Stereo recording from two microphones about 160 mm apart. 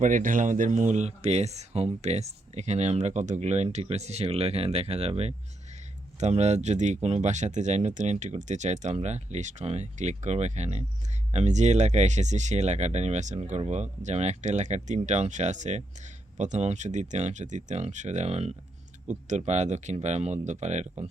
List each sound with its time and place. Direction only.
0.0 s speech: 55° right (ahead or behind)